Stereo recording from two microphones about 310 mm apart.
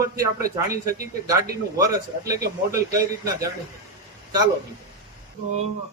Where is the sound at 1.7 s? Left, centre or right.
Centre.